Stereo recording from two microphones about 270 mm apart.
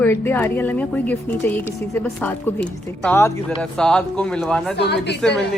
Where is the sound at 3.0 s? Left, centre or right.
Centre.